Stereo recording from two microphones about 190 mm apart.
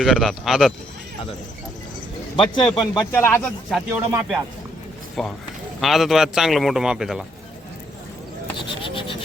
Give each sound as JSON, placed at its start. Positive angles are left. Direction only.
{"t": 0.0, "sound": "a man's voice", "side_deg": 0}
{"t": 2.3, "sound": "speech", "side_deg": 25}
{"t": 3.8, "sound": "a man's voice", "side_deg": -10}
{"t": 8.8, "sound": "a sound", "side_deg": 25}